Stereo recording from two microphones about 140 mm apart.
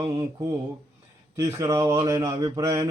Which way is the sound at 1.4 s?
25° right (ahead or behind).